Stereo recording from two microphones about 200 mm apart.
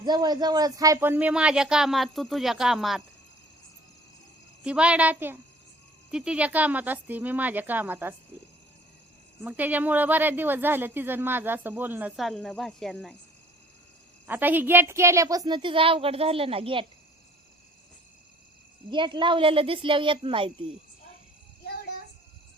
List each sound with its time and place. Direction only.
0.0 s speech: 20° right (ahead or behind); by 3.0 s centre (ahead or behind)
4.6 s a woman's voice: 5° right (ahead or behind)
9.4 s a woman's voice: 10° right (ahead or behind)
14.3 s a woman's voice: 10° right (ahead or behind); by 16.8 s 30° right (ahead or behind)
18.9 s a woman's voice: 25° right (ahead or behind)